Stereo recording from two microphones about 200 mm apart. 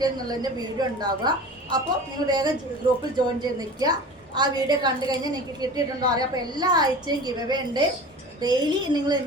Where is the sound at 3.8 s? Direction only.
20° right (ahead or behind).